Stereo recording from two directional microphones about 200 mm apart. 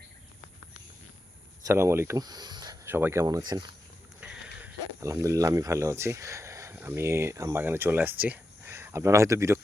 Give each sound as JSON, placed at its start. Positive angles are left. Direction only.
{"t": 1.6, "sound": "speech", "side_deg": -15}